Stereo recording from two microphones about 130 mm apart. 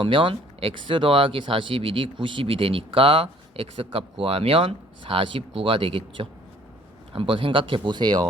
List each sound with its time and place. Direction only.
0.0 s speech: 40° right (ahead or behind)